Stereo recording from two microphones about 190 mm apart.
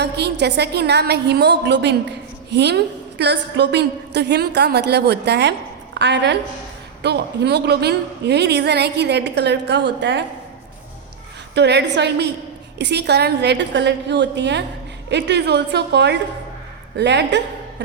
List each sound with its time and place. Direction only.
0.0 s a woman's voice: 60° right (ahead or behind)
11.5 s a woman's voice: 65° right (ahead or behind)